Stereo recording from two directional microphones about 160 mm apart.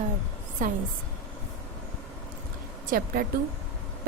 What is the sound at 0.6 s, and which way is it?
Speech, 55° right (ahead or behind).